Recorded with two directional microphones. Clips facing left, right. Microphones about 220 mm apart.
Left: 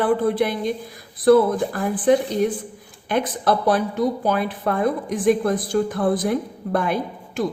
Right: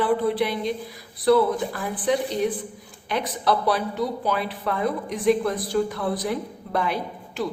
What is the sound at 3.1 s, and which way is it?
A woman's voice, 50° left (ahead or behind).